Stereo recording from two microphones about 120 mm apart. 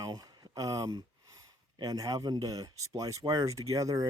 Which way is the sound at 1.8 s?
30° right (ahead or behind).